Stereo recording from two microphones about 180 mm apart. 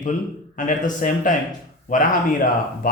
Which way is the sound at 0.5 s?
45° left (ahead or behind).